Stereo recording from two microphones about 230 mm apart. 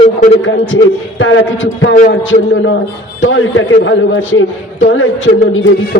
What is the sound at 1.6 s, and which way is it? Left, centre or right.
Speech, left.